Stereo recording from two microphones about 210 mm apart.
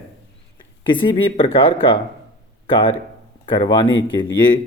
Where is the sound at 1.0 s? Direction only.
25° left (ahead or behind).